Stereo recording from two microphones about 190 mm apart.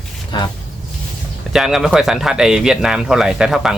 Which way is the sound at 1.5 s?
Centre (ahead or behind).